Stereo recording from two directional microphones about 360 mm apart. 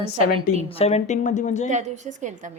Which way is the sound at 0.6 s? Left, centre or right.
Centre.